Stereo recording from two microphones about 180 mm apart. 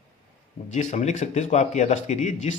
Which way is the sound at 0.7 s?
40° left (ahead or behind).